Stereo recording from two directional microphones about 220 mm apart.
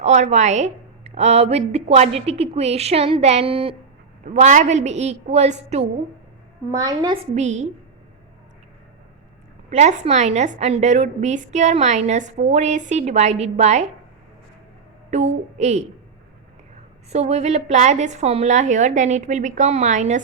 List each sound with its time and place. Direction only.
0.0 s a woman's voice: 30° right (ahead or behind)
6.7 s a child's voice: 15° right (ahead or behind)
7.3 s a woman's voice: 30° right (ahead or behind)
9.6 s a woman's voice: 30° right (ahead or behind)
15.1 s a woman's voice: 30° right (ahead or behind)
17.1 s a woman's voice: 30° right (ahead or behind)